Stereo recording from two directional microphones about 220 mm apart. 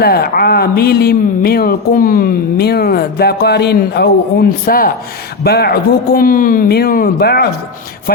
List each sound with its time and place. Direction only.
0.0 s speech: 45° left (ahead or behind)